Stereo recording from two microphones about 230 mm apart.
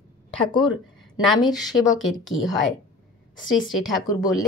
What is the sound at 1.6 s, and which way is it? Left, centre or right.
Speech, centre.